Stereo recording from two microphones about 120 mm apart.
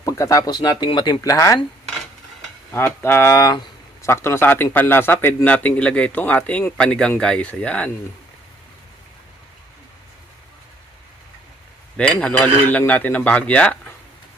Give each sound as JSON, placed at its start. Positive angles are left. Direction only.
{"t": 0.0, "sound": "speech", "side_deg": 25}
{"t": 2.7, "sound": "speech", "side_deg": 20}
{"t": 11.9, "sound": "speech", "side_deg": 10}